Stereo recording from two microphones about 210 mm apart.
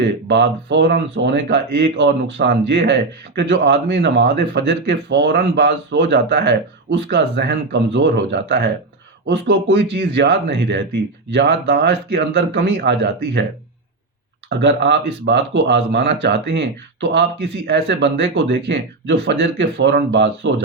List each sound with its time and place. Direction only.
0.0 s a man's voice: 55° right (ahead or behind)
14.6 s speech: 55° right (ahead or behind)